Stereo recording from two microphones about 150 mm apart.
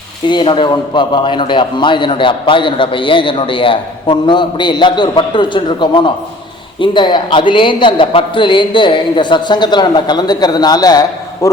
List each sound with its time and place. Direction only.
0.3 s a man's voice: 30° left (ahead or behind)